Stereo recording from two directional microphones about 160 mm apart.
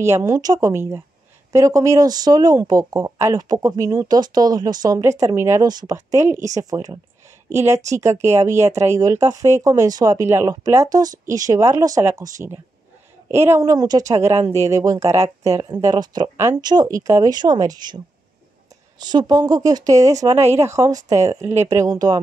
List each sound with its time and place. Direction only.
0.0 s a woman's voice: 20° right (ahead or behind)